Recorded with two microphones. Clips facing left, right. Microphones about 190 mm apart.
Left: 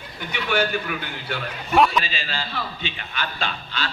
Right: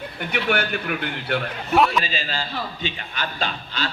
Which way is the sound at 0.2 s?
60° right (ahead or behind).